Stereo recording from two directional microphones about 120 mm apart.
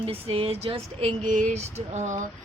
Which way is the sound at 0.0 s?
50° right (ahead or behind).